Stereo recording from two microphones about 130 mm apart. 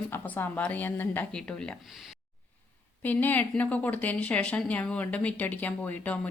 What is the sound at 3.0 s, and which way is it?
A woman's voice, 15° left (ahead or behind).